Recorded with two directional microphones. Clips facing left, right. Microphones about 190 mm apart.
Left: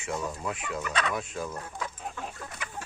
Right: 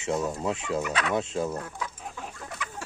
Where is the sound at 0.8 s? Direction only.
10° right (ahead or behind).